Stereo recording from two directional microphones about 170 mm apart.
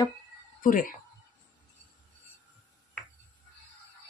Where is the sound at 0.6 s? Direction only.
55° left (ahead or behind).